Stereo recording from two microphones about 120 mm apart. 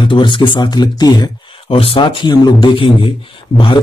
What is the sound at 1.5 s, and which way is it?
A man's voice, 50° left (ahead or behind).